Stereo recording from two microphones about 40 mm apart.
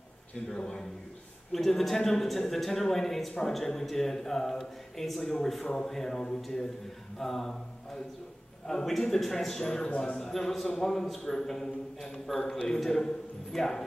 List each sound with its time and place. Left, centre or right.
0.5 s speech: centre
1.5 s speech: centre
7.2 s a sound: centre
8.6 s speech: centre